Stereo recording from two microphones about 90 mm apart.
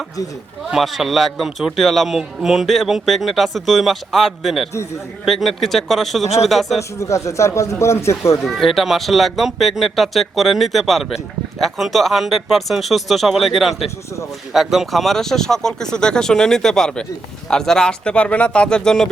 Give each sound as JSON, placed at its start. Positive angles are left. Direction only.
{"t": 0.7, "sound": "a man's voice", "side_deg": 0}
{"t": 7.0, "sound": "speech", "side_deg": 35}
{"t": 8.4, "sound": "a man's voice", "side_deg": 0}